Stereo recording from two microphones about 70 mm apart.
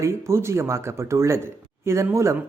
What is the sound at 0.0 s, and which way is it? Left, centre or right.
Speech, right.